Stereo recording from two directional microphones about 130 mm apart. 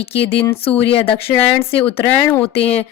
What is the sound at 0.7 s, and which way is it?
Speech, 45° left (ahead or behind).